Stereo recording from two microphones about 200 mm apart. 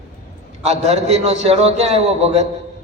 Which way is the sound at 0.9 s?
30° right (ahead or behind).